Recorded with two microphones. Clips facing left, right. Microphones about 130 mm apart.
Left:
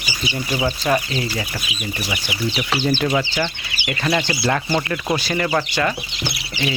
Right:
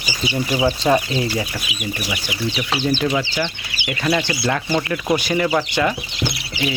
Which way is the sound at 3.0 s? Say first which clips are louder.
Even; 5° left (ahead or behind).